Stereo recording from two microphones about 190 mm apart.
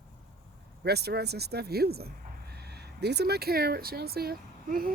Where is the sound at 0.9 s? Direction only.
60° right (ahead or behind).